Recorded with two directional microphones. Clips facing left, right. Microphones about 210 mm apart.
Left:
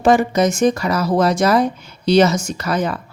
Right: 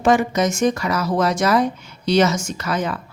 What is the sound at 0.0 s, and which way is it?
Speech, 35° left (ahead or behind).